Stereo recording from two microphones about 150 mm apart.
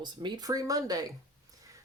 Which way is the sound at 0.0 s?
30° right (ahead or behind).